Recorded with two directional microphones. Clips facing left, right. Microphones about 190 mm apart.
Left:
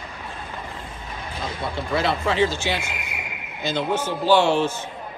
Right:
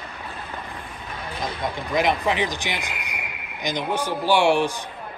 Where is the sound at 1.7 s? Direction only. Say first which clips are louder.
Right 1 dB; 15° right (ahead or behind).